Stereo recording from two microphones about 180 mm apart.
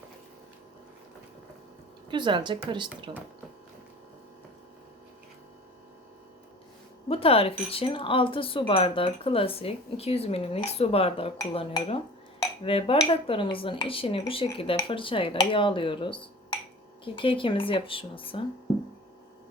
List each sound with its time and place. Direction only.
2.0 s speech: 25° right (ahead or behind)
7.1 s speech: 30° left (ahead or behind)